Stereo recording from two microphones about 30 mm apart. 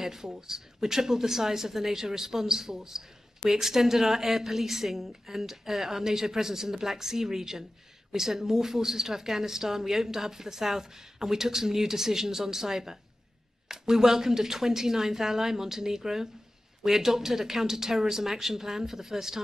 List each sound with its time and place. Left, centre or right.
0.0 s a woman's voice: centre